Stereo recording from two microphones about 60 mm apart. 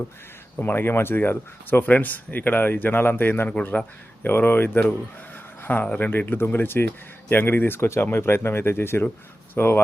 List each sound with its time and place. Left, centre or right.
0.6 s speech: left